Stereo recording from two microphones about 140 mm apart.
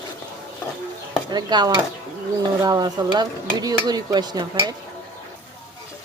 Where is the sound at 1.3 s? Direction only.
30° right (ahead or behind).